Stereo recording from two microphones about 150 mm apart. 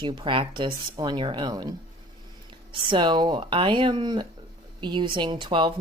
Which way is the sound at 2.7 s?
30° right (ahead or behind).